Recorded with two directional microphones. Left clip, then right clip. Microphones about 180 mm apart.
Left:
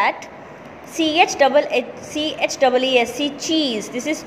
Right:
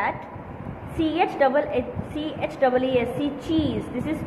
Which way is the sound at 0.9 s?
30° left (ahead or behind).